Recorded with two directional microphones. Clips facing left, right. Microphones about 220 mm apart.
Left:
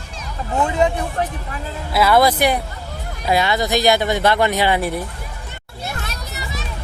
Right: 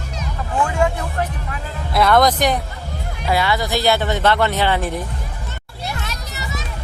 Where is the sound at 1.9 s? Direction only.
5° left (ahead or behind).